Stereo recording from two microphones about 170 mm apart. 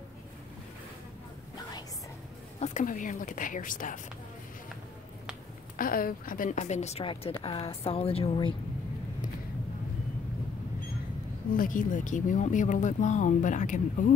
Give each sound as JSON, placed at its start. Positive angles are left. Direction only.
{"t": 2.6, "sound": "speech", "side_deg": 50}
{"t": 5.8, "sound": "speech", "side_deg": 55}
{"t": 11.5, "sound": "speech", "side_deg": 50}